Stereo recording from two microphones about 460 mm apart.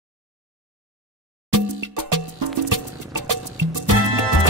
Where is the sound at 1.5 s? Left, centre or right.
Right.